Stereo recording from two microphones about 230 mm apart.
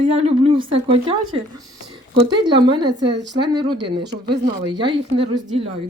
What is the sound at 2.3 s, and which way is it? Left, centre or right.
Speech, centre.